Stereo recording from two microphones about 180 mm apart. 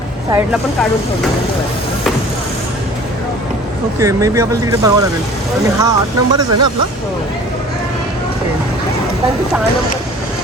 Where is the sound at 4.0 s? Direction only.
15° right (ahead or behind).